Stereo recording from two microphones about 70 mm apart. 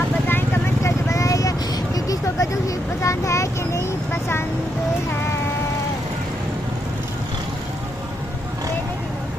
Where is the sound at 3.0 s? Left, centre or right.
Left.